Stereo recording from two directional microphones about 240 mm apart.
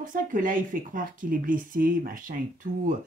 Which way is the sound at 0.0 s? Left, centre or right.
Right.